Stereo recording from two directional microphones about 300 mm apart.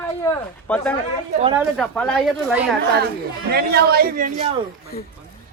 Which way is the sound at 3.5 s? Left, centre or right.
Right.